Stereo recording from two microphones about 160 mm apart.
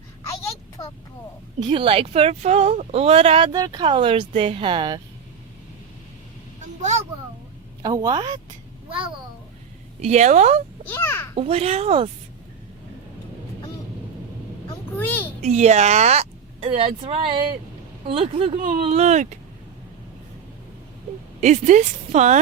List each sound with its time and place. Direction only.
1.5 s speech: 30° right (ahead or behind)
6.8 s a sound: 45° right (ahead or behind)
7.8 s a woman's voice: 25° right (ahead or behind)
10.0 s a woman's voice: 45° right (ahead or behind)
10.8 s a child's voice: 15° left (ahead or behind)
11.3 s speech: 35° right (ahead or behind)
14.9 s a child's voice: 10° left (ahead or behind)
15.4 s a woman's voice: 45° right (ahead or behind)
21.4 s a woman's voice: 50° right (ahead or behind)